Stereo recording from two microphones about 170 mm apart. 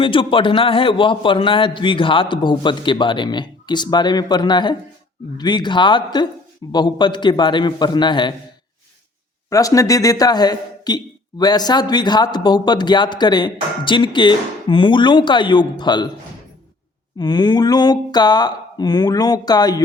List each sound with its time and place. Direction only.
0.0 s a man's voice: 30° left (ahead or behind)
9.5 s a man's voice: 20° left (ahead or behind)
17.2 s a man's voice: 25° left (ahead or behind)